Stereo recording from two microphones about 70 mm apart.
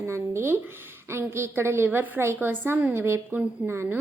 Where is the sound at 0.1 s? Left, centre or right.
Right.